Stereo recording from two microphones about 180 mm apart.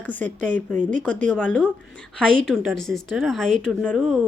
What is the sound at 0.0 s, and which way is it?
Speech, 10° left (ahead or behind).